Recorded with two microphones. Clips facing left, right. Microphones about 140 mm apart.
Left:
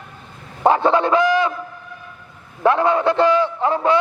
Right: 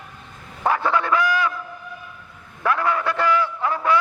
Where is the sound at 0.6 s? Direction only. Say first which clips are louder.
Left 6 dB; 25° left (ahead or behind).